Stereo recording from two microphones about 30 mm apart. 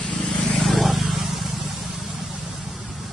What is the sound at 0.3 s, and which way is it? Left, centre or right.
Vehicle, left.